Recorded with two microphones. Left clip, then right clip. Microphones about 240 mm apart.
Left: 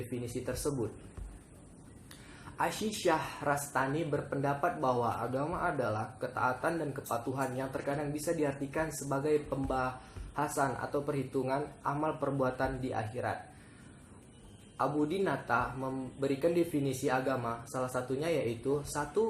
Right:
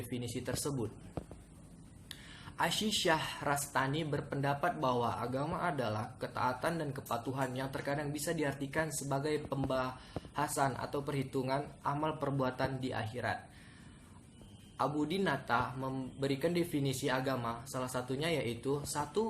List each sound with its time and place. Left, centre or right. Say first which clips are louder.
2.6 s speech: right 1 dB; right
14.8 s speech: left 3 dB; right